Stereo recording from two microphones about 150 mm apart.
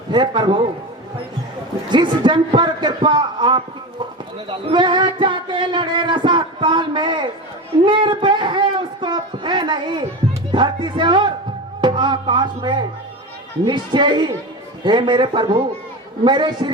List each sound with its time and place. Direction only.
0.1 s speech: 30° right (ahead or behind)
1.9 s a woman's voice: 30° right (ahead or behind)